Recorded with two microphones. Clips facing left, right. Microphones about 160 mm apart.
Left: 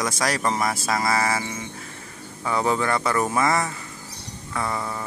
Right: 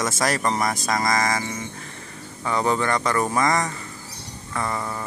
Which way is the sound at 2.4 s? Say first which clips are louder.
Even; 5° left (ahead or behind).